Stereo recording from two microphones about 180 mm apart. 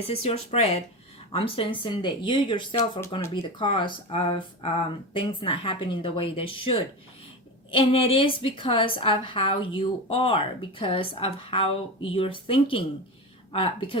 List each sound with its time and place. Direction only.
0.1 s a woman's voice: 35° left (ahead or behind)